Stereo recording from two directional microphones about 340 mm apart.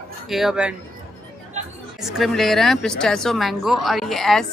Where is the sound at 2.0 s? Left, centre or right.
Centre.